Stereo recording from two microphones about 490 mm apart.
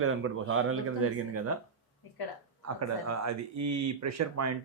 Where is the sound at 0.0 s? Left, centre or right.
Right.